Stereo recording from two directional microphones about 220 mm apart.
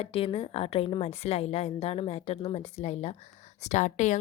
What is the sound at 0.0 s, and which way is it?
A woman's voice, 25° left (ahead or behind).